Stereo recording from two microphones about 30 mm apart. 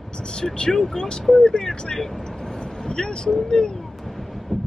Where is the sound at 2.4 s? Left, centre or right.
Centre.